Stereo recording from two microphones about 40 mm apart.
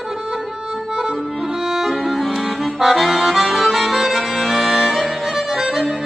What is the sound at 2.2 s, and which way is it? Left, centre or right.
Accordion, centre.